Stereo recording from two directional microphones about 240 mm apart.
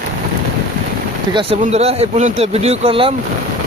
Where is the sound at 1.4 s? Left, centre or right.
Right.